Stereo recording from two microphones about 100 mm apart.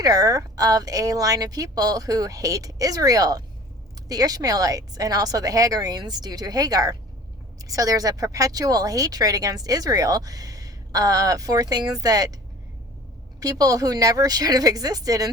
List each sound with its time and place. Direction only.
0.0 s speech: 35° right (ahead or behind)
13.4 s speech: 35° right (ahead or behind)